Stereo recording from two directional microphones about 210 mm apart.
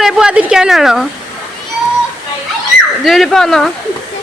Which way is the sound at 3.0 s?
Centre (ahead or behind).